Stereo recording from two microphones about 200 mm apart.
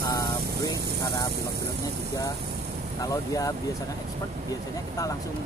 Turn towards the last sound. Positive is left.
turn(degrees=15)  # may be behind; listen again after turning